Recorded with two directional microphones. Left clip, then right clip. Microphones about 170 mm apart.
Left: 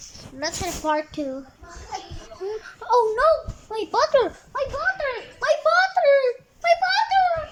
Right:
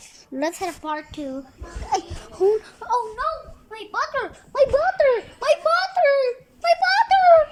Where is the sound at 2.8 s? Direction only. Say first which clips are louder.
Left 4 dB; 10° right (ahead or behind).